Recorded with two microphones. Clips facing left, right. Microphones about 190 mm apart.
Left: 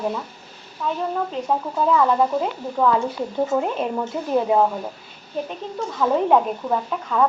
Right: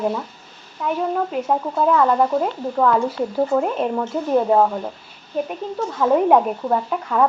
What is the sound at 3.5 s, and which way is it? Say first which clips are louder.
Speech: right 2 dB; centre (ahead or behind).